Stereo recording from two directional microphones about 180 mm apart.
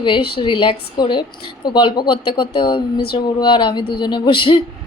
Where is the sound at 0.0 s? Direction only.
25° left (ahead or behind).